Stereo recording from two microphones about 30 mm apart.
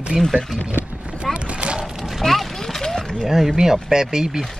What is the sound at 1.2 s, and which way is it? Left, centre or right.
Boat, right.